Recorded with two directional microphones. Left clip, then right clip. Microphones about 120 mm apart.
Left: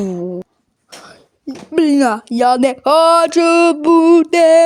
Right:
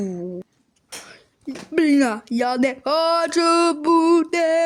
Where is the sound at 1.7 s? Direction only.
15° left (ahead or behind); by 3.3 s 35° left (ahead or behind).